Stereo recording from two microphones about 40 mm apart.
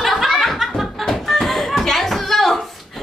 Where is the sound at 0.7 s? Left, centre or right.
Centre.